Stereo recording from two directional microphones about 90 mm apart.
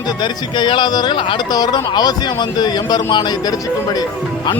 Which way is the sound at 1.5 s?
45° left (ahead or behind).